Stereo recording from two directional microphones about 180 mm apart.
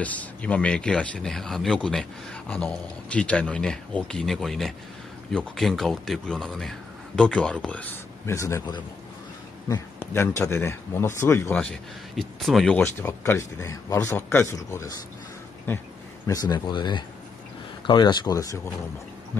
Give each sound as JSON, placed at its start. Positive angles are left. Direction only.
{"t": 0.0, "sound": "speech", "side_deg": 10}